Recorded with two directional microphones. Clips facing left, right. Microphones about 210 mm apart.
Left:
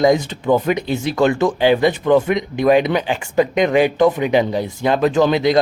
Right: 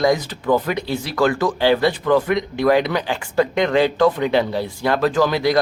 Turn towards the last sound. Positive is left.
turn(degrees=20)  # may be behind; listen again after turning